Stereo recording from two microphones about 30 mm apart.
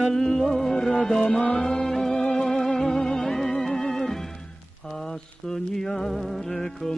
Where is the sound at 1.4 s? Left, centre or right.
Left.